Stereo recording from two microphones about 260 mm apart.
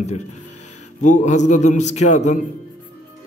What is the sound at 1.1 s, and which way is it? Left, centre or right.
A man's voice, left.